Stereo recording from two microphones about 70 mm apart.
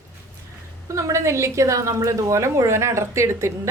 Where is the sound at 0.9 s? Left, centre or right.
Right.